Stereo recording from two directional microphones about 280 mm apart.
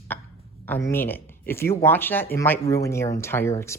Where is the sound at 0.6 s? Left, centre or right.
Centre.